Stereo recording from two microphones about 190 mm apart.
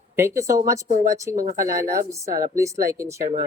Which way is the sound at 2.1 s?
15° right (ahead or behind).